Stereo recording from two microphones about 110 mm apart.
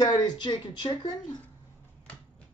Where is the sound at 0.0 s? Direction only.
35° left (ahead or behind).